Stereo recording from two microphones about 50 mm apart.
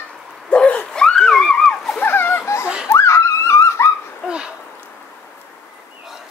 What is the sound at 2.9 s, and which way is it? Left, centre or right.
Dog, left.